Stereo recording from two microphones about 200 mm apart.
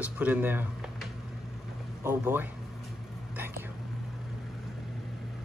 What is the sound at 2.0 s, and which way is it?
Speech, 10° right (ahead or behind).